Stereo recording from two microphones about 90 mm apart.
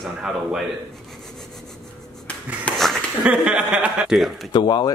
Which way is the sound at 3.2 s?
10° right (ahead or behind).